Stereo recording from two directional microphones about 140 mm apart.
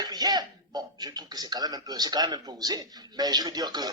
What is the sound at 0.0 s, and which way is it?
A man's voice, 30° right (ahead or behind).